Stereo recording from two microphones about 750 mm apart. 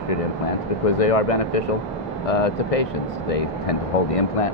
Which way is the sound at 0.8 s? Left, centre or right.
Left.